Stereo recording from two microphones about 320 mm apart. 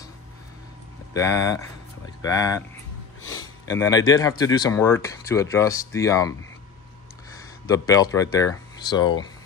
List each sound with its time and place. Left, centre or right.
1.1 s speech: centre
3.2 s a sound: left
3.7 s speech: centre
7.6 s speech: centre